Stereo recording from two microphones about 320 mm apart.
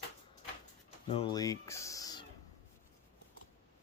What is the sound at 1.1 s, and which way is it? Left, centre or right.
Speech, centre.